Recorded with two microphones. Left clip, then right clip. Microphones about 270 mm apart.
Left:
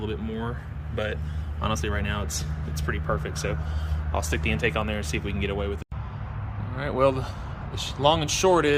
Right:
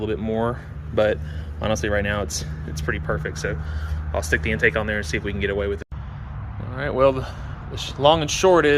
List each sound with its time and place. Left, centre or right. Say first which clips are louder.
0.0 s speech: right 9 dB; centre